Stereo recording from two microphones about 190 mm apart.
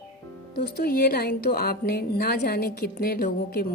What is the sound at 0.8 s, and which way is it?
A woman's voice, 55° left (ahead or behind).